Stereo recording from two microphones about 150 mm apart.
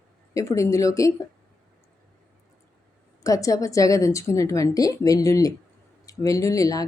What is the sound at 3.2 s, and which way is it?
Speech, 20° left (ahead or behind).